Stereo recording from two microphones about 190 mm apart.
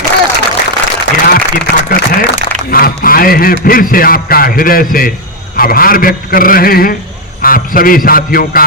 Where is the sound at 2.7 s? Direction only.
50° left (ahead or behind).